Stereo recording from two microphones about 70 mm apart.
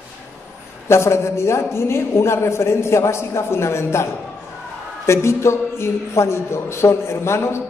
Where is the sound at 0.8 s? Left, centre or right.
Left.